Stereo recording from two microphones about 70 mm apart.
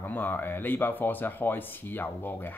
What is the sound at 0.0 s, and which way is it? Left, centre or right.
Speech, left.